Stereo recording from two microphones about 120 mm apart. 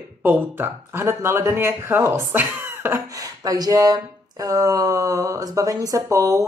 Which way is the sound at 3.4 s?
30° right (ahead or behind).